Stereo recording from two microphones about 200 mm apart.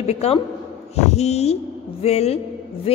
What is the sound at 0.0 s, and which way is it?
A woman's voice, 30° left (ahead or behind).